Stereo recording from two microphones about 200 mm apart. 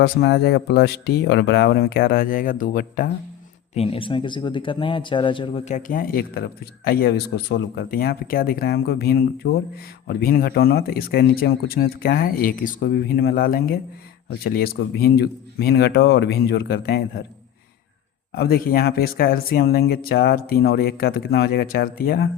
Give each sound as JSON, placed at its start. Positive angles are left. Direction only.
{"t": 0.0, "sound": "a man's voice", "side_deg": 55}
{"t": 3.8, "sound": "a man's voice", "side_deg": 25}
{"t": 18.3, "sound": "a man's voice", "side_deg": 50}